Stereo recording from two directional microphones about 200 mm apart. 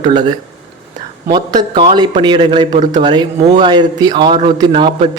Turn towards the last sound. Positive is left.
turn(degrees=-25)  # may be behind; listen again after turning